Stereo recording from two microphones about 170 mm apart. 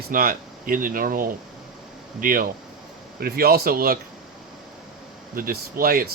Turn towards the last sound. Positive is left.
turn(degrees=-60)  # may be behind; listen again after turning